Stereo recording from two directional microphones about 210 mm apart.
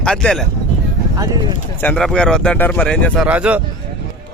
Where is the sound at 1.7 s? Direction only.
5° left (ahead or behind).